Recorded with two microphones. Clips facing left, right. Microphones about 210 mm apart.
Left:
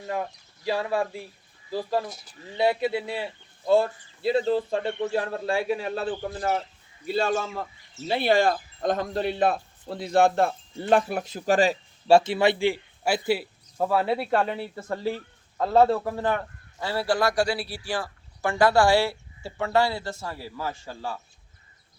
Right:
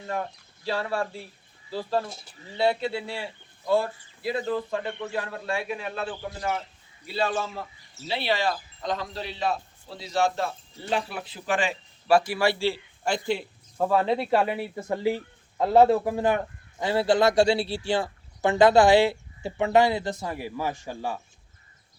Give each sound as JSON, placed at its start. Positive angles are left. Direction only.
{"t": 0.1, "sound": "speech", "side_deg": 15}
{"t": 6.1, "sound": "a man's voice", "side_deg": 50}
{"t": 14.3, "sound": "speech", "side_deg": -5}